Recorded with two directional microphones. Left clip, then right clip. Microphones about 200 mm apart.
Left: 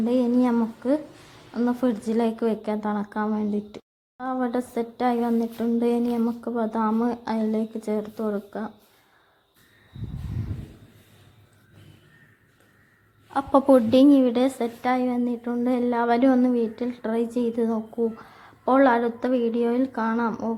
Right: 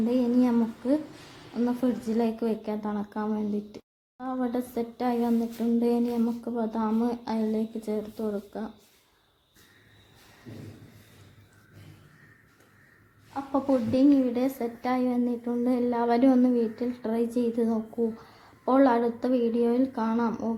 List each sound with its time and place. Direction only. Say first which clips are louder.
0.0 s speech: left 3 dB; 15° left (ahead or behind)
13.3 s a woman's voice: left 9 dB; 40° left (ahead or behind); by 14.7 s 25° left (ahead or behind)
14.8 s speech: left 3 dB; 10° left (ahead or behind)